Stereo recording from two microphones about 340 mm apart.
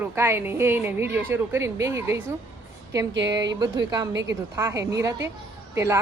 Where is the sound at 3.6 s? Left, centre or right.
Centre.